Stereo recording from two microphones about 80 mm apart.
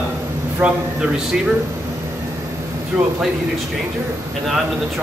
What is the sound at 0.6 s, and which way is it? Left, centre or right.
Speech, centre.